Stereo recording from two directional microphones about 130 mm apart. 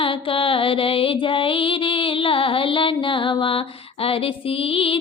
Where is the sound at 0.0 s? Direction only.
40° left (ahead or behind).